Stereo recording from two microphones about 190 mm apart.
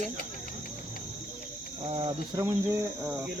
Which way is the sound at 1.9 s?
25° right (ahead or behind).